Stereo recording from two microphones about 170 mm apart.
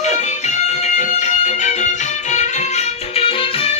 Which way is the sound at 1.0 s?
45° left (ahead or behind).